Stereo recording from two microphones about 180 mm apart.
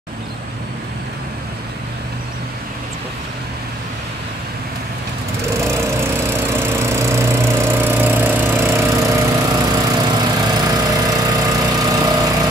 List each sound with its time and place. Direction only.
6.6 s lawn mower: 15° right (ahead or behind)